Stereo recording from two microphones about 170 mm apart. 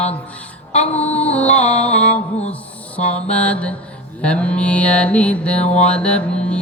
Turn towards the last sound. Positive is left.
turn(degrees=5)  # may be behind; listen again after turning